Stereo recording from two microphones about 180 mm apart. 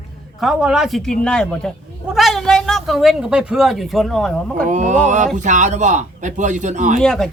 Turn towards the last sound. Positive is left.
turn(degrees=0)  # may be behind; listen again after turning